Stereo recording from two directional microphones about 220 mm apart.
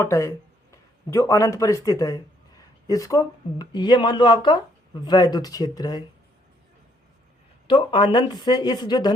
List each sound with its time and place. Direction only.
0.0 s a man's voice: 15° left (ahead or behind)
7.7 s speech: 20° left (ahead or behind)